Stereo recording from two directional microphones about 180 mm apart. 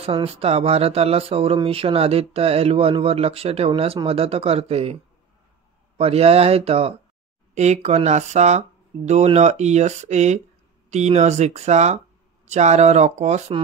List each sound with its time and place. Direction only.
0.0 s speech: 30° right (ahead or behind)
5.9 s speech: 35° right (ahead or behind)